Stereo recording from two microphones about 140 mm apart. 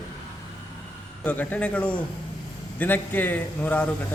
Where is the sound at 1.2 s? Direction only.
10° left (ahead or behind).